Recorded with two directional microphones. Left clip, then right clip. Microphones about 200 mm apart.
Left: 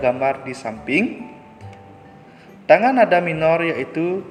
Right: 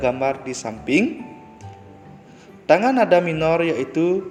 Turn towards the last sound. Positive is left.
turn(degrees=-35)  # may be behind; listen again after turning